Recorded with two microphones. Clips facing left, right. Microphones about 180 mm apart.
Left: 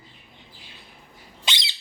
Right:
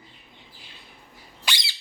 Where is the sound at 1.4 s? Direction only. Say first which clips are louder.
Even; 20° left (ahead or behind).